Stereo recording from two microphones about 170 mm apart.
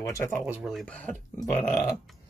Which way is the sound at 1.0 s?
10° left (ahead or behind).